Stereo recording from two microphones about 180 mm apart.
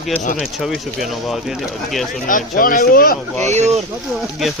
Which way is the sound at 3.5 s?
40° right (ahead or behind).